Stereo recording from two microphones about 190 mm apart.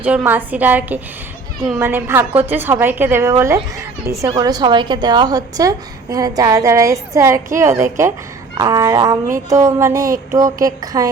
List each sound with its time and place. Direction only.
0.0 s music: 5° right (ahead or behind)
4.3 s a woman's voice: 20° right (ahead or behind)
8.5 s music: 15° right (ahead or behind)